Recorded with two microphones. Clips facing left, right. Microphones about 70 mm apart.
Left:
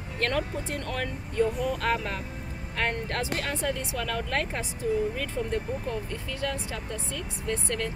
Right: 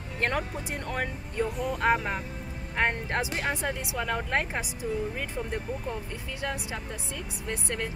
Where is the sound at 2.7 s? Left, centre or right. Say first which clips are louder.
Right 2 dB; centre.